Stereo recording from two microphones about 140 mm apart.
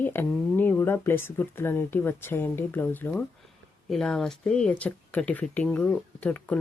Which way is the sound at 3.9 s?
5° left (ahead or behind).